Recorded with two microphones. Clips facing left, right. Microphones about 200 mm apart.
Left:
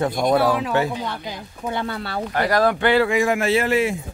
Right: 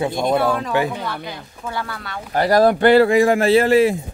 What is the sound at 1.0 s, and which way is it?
Speech, 20° left (ahead or behind).